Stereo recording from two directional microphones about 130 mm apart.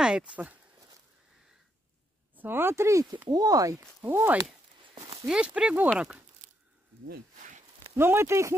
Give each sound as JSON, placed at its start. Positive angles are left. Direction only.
{"t": 0.0, "sound": "speech", "side_deg": -5}
{"t": 2.3, "sound": "speech", "side_deg": -15}
{"t": 4.0, "sound": "speech", "side_deg": -15}
{"t": 5.2, "sound": "speech", "side_deg": -5}
{"t": 6.4, "sound": "a sound", "side_deg": -90}
{"t": 7.9, "sound": "speech", "side_deg": -20}